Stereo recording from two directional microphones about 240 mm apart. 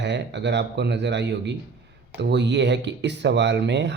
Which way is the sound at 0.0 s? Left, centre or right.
Right.